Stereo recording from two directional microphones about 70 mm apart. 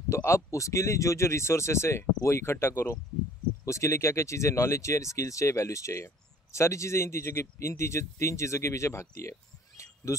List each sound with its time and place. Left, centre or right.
0.1 s speech: left